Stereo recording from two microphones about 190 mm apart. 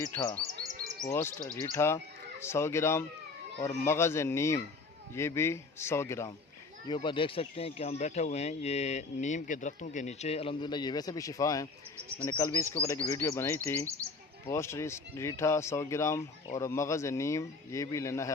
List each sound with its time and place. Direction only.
0.0 s speech: 15° left (ahead or behind)
1.6 s speech: 15° left (ahead or behind)
6.8 s speech: 25° left (ahead or behind)
13.8 s speech: 15° right (ahead or behind)
14.4 s speech: 15° left (ahead or behind)